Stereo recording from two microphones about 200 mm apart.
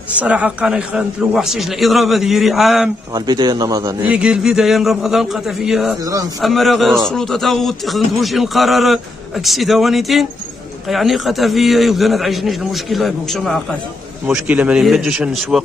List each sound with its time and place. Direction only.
0.1 s a man's voice: 5° right (ahead or behind)
3.2 s a man's voice: 20° right (ahead or behind)
4.1 s a man's voice: 5° right (ahead or behind)